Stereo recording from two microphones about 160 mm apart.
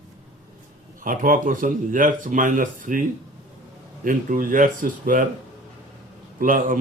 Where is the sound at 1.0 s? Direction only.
60° right (ahead or behind).